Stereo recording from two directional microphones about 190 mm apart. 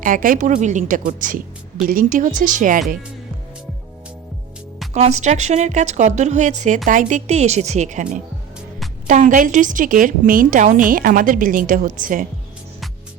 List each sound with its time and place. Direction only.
0.0 s a woman's voice: 45° right (ahead or behind)
4.9 s a woman's voice: 35° right (ahead or behind)